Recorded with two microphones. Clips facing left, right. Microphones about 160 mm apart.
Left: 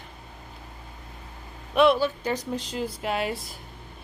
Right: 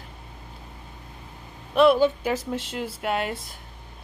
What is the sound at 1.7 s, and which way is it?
Speech, centre (ahead or behind).